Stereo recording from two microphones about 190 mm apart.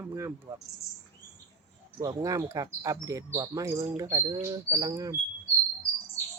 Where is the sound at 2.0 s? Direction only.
15° right (ahead or behind).